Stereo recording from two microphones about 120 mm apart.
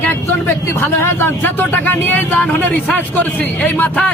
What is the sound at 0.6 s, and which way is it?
Speech, 20° left (ahead or behind).